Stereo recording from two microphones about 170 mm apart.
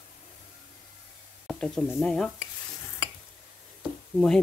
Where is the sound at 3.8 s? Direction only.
Centre (ahead or behind).